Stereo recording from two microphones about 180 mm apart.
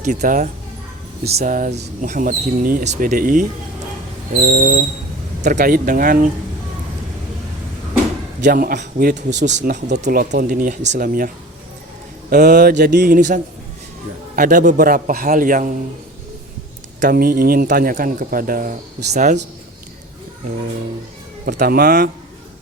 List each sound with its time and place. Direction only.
0.0 s speech: 45° right (ahead or behind)
8.4 s speech: 50° right (ahead or behind)
10.0 s speech: 55° right (ahead or behind)
12.3 s mantra: 65° right (ahead or behind)
13.1 s speech: 45° right (ahead or behind)
17.0 s speech: 55° right (ahead or behind)
21.4 s mantra: 55° right (ahead or behind)